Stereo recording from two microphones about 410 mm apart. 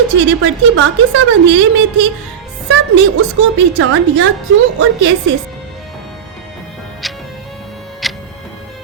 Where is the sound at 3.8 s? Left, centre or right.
Right.